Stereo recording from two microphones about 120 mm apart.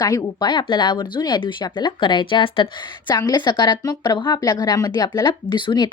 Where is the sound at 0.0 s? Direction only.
35° left (ahead or behind).